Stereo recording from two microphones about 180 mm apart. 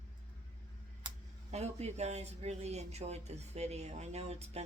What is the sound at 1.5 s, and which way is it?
Speech, 40° right (ahead or behind).